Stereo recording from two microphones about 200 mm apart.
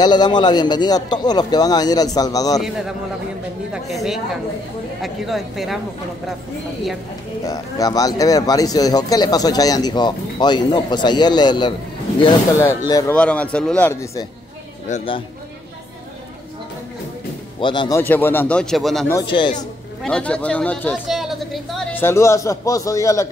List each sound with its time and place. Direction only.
0.0 s speech: 20° left (ahead or behind)
3.7 s speech: centre (ahead or behind)
7.4 s a man's voice: 20° left (ahead or behind)
14.9 s speech: 25° left (ahead or behind)
17.6 s a man's voice: 25° left (ahead or behind); by 19.0 s centre (ahead or behind)
19.2 s speech: 25° left (ahead or behind)
20.0 s speech: 5° left (ahead or behind)
21.9 s a man's voice: 15° left (ahead or behind)